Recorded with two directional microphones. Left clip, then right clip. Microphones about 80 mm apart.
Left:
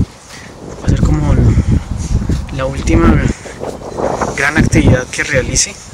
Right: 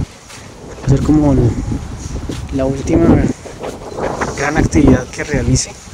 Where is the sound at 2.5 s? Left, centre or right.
Left.